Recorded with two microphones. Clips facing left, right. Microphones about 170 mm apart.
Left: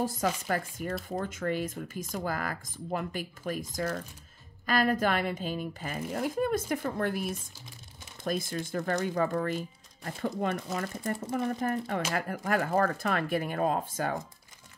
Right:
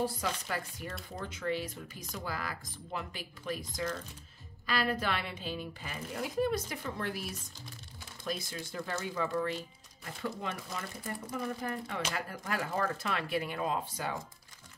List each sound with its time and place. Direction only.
0.0 s speech: 45° left (ahead or behind)